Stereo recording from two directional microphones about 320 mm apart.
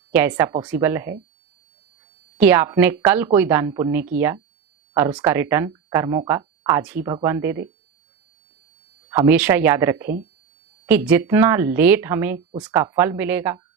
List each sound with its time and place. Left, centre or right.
0.1 s speech: centre
2.4 s speech: centre
9.0 s speech: centre